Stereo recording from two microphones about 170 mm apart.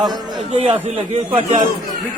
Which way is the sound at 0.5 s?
35° right (ahead or behind).